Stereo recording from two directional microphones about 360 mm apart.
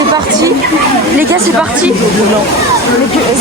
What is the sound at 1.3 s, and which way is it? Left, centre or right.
Speech, centre.